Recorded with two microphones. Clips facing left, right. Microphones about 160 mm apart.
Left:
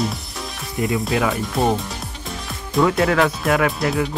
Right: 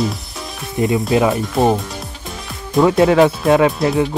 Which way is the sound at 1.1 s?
25° right (ahead or behind).